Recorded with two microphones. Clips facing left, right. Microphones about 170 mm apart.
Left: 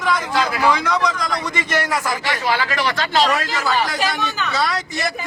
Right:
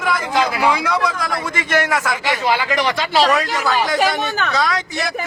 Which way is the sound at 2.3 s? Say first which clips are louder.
Right 4 dB; 20° right (ahead or behind).